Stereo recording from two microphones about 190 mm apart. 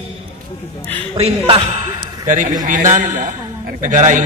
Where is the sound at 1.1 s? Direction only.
30° right (ahead or behind).